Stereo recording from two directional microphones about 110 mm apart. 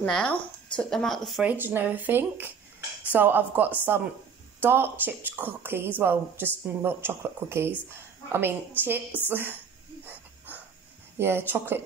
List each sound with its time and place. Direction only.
0.0 s speech: 10° left (ahead or behind)
1.4 s speech: 15° right (ahead or behind)
10.0 s dog: 15° right (ahead or behind)
11.1 s speech: 20° right (ahead or behind)